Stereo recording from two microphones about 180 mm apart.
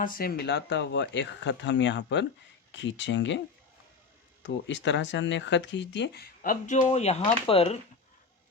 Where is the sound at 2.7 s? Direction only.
90° left.